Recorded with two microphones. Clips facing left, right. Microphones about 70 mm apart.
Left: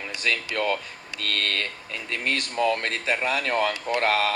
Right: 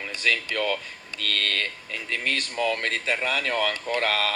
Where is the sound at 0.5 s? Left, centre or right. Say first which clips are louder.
Left 1 dB; left.